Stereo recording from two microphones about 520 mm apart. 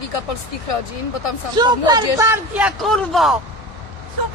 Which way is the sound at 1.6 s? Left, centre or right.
Centre.